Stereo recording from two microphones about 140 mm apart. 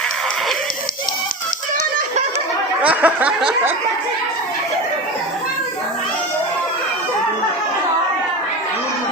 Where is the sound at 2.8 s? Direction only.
10° right (ahead or behind).